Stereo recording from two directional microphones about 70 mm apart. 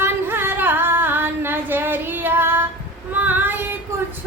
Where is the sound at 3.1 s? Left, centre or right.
Right.